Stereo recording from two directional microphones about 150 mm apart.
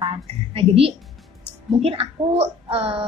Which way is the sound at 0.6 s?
40° right (ahead or behind).